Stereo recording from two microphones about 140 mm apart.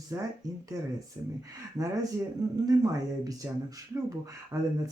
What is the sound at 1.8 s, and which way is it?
Speech, 25° right (ahead or behind).